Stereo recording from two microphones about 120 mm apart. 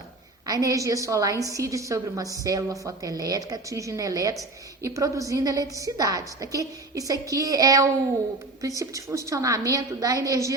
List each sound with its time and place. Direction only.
0.4 s a woman's voice: 30° right (ahead or behind)